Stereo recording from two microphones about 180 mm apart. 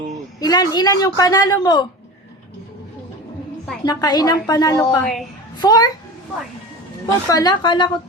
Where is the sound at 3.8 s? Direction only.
20° left (ahead or behind).